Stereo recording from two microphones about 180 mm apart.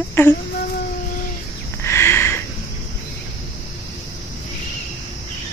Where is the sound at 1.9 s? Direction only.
15° left (ahead or behind).